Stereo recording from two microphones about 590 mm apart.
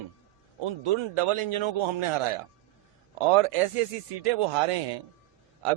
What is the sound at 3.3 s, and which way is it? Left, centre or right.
Speech, right.